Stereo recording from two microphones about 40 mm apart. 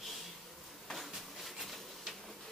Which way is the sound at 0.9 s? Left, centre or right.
Centre.